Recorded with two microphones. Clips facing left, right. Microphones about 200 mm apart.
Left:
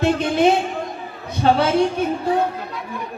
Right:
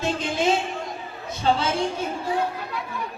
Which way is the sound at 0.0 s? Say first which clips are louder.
Left 7 dB; 60° left (ahead or behind).